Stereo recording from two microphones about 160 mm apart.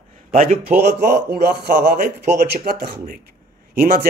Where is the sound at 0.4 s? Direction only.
65° right (ahead or behind); by 1.4 s 90° right.